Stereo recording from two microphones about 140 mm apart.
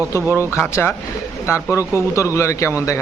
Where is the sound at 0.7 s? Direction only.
15° left (ahead or behind).